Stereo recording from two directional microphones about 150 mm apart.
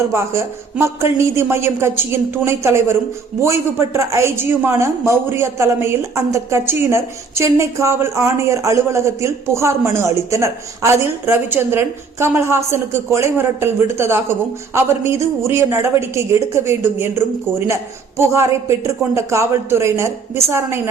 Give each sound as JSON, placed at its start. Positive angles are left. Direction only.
{"t": 0.1, "sound": "speech", "side_deg": -15}